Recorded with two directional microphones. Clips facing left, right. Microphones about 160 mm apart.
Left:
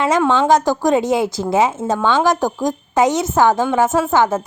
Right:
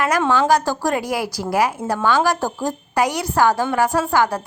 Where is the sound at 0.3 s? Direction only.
20° left (ahead or behind).